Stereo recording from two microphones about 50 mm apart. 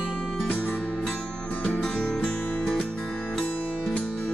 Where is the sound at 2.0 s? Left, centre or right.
Left.